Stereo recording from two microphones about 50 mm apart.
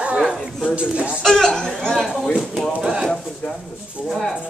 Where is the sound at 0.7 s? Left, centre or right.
Right.